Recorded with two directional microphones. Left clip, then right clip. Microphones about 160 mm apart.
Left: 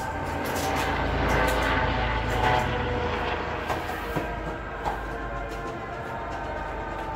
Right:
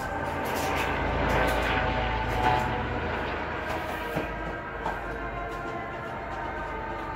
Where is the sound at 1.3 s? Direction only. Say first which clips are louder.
Left 2 dB; centre (ahead or behind).